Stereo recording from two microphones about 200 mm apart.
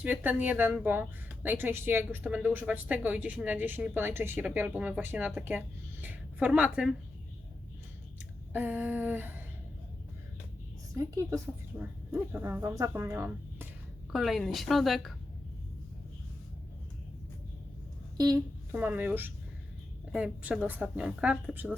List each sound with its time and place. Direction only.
0.0 s a woman's voice: 10° right (ahead or behind)
8.5 s a woman's voice: 10° right (ahead or behind)
10.9 s a woman's voice: 15° right (ahead or behind)
14.1 s speech: centre (ahead or behind)
18.2 s a sound: 20° right (ahead or behind)
18.8 s a woman's voice: 10° right (ahead or behind)